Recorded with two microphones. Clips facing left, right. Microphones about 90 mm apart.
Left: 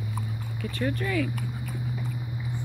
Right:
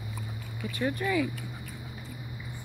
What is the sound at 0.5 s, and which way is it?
Speech, 15° right (ahead or behind).